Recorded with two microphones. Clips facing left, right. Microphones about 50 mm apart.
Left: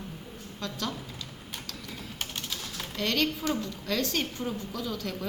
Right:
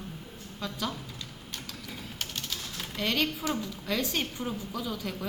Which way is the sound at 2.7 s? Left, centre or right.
Centre.